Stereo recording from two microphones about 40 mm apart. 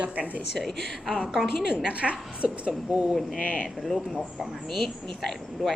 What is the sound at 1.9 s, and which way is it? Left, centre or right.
A woman's voice, right.